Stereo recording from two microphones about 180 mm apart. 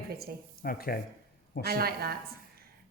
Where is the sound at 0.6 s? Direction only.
55° left (ahead or behind).